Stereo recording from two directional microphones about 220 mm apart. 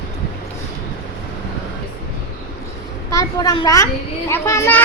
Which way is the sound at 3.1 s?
15° left (ahead or behind).